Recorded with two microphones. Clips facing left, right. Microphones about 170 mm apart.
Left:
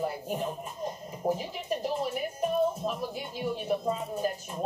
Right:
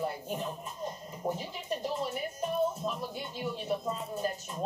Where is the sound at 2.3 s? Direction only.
10° left (ahead or behind).